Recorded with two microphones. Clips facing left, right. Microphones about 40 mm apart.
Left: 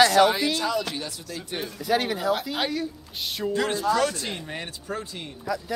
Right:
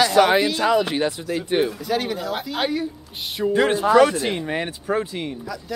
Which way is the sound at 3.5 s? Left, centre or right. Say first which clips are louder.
Right 7 dB; right.